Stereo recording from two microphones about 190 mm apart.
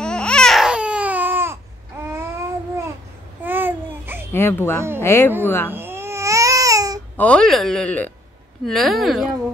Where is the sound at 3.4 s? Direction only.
10° right (ahead or behind).